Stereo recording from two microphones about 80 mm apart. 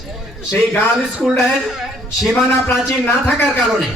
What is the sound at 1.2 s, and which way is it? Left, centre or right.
Speech, centre.